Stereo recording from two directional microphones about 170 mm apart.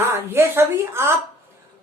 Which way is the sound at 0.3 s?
15° right (ahead or behind).